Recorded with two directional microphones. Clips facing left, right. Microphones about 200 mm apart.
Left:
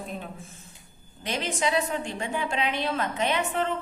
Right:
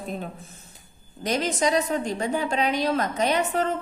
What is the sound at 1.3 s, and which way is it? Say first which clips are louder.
A woman's voice: right 4 dB; 40° right (ahead or behind).